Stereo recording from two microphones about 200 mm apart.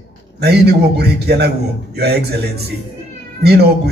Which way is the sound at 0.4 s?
55° right (ahead or behind).